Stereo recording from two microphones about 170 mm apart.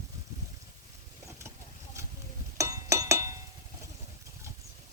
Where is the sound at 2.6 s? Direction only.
20° right (ahead or behind).